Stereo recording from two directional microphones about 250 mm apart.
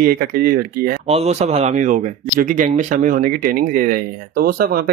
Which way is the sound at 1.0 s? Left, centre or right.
Right.